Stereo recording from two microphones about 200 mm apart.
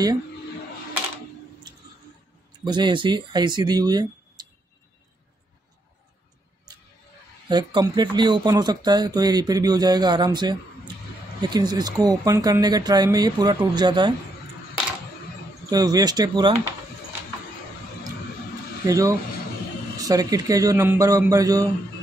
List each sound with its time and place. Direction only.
2.6 s speech: 20° right (ahead or behind)
7.4 s speech: 20° right (ahead or behind)
15.7 s speech: 20° right (ahead or behind)
18.9 s a man's voice: 15° right (ahead or behind)